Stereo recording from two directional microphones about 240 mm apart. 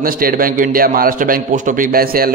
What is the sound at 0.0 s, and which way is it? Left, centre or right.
A man's voice, right.